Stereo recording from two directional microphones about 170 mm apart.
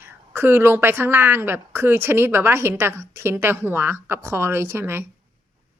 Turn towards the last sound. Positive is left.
turn(degrees=-15)  # may be behind; listen again after turning